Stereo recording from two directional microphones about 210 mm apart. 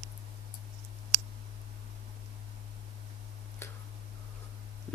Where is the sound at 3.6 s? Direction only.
10° left (ahead or behind).